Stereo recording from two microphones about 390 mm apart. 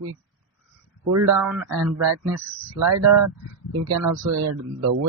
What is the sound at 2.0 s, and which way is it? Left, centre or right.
Speech, right.